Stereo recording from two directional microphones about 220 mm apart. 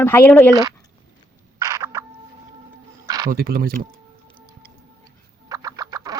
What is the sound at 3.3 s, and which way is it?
Speech, 40° right (ahead or behind).